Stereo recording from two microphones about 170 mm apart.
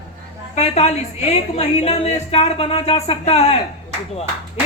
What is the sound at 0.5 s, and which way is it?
A woman's voice, 40° left (ahead or behind).